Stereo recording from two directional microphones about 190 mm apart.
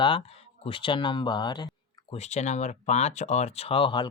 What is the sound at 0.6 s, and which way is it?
Speech, 25° left (ahead or behind).